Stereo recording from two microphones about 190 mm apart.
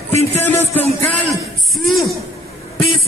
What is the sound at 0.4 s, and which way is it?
Music, 10° left (ahead or behind).